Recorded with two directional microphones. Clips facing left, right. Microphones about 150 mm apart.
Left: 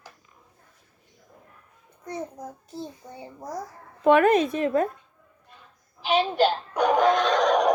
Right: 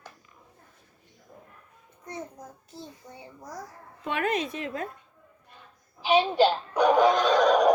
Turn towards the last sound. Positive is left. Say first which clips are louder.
# right 1 dB
turn(degrees=-5)  # may be behind; listen again after turning